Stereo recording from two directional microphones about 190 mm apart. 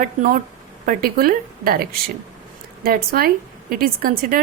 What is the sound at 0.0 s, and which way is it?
Speech, 45° right (ahead or behind).